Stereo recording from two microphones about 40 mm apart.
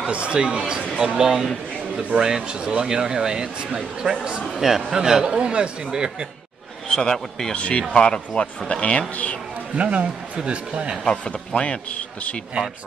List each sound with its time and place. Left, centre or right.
0.1 s speech: right
4.6 s speech: centre
7.0 s a man's voice: centre
7.5 s a man's voice: left
9.8 s speech: right
11.1 s a man's voice: left